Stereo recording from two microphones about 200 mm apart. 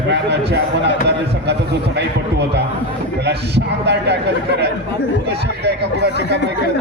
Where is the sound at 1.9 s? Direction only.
55° right (ahead or behind).